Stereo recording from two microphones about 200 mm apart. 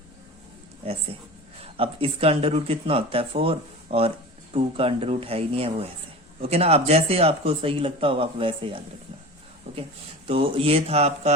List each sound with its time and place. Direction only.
0.8 s speech: 30° right (ahead or behind)
9.7 s a sound: 30° right (ahead or behind)
10.2 s speech: 25° right (ahead or behind)